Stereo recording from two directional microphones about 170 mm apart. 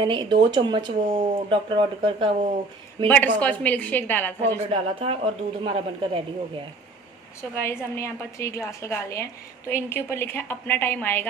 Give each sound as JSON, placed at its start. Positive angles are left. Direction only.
{"t": 0.0, "sound": "speech", "side_deg": -30}
{"t": 3.1, "sound": "a woman's voice", "side_deg": 10}
{"t": 4.6, "sound": "speech", "side_deg": -35}
{"t": 7.6, "sound": "a woman's voice", "side_deg": 15}